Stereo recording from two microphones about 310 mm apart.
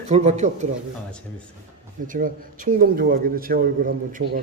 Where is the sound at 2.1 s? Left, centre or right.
Right.